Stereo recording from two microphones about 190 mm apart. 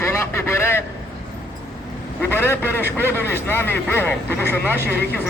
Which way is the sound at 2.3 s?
10° left (ahead or behind).